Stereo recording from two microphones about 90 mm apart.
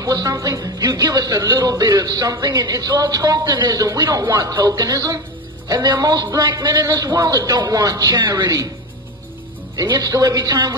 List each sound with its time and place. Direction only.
0.0 s speech: 45° right (ahead or behind)
9.8 s speech: 45° right (ahead or behind)